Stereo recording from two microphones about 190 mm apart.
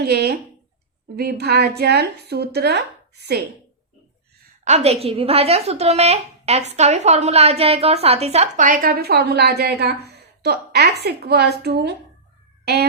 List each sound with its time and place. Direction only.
0.0 s a sound: 60° right (ahead or behind)
1.1 s speech: 55° right (ahead or behind)
4.6 s a woman's voice: 35° right (ahead or behind); by 11.9 s 60° right (ahead or behind)